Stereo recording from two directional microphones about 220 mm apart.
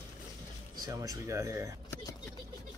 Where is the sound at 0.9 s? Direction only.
15° right (ahead or behind).